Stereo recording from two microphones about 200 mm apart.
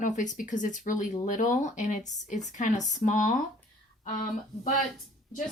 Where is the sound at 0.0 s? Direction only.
40° left (ahead or behind).